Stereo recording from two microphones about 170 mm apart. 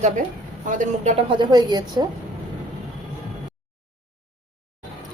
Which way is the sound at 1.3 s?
25° right (ahead or behind).